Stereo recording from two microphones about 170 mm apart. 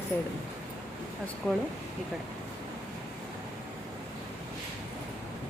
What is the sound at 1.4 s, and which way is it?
Speech, 10° left (ahead or behind).